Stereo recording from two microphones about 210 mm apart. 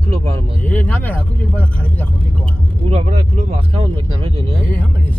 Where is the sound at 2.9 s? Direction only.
30° right (ahead or behind).